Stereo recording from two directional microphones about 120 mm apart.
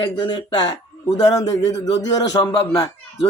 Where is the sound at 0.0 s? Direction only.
40° left (ahead or behind).